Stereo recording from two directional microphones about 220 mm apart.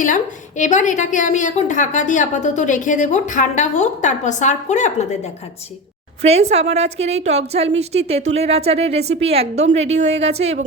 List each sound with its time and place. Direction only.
0.0 s a woman's voice: 35° left (ahead or behind)
6.2 s a woman's voice: 30° right (ahead or behind)